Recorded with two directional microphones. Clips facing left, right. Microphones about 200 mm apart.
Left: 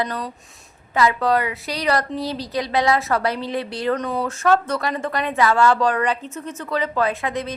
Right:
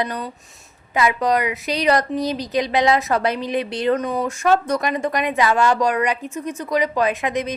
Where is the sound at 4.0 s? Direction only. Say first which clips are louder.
Right 2 dB; 5° right (ahead or behind).